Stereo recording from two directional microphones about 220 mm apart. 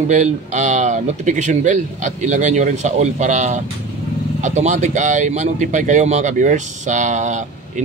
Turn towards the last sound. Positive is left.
turn(degrees=-35)  # may be behind; listen again after turning